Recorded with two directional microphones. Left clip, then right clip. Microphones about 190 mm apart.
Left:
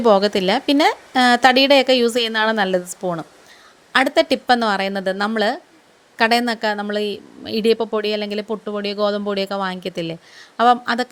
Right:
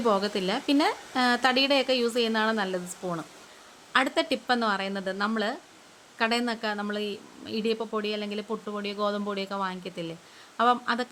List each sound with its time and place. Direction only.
0.0 s a woman's voice: 35° left (ahead or behind)